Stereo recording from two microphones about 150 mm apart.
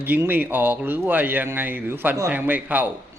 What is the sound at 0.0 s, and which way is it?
Speech, 10° right (ahead or behind).